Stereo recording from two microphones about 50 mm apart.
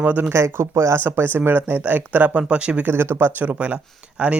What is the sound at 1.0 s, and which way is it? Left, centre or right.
Speech, right.